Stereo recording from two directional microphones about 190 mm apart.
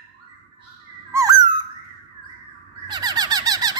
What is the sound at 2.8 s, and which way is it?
Squeak, 20° right (ahead or behind).